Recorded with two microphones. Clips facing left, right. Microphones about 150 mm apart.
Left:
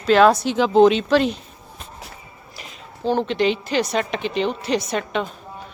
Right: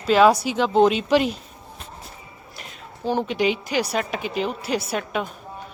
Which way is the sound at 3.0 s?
10° right (ahead or behind).